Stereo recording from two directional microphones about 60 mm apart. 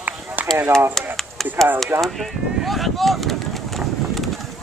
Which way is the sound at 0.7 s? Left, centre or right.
Right.